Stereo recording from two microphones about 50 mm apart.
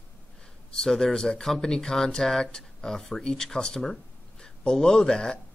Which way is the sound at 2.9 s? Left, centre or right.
Centre.